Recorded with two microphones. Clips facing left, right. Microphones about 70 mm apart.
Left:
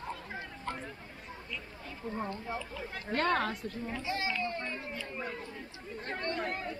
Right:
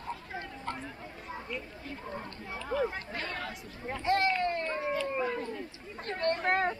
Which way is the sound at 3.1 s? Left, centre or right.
Left.